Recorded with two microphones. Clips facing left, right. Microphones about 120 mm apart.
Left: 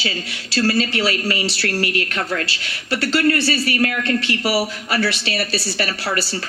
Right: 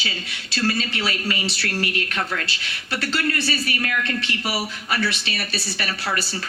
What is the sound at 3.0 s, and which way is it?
Speech, 35° left (ahead or behind).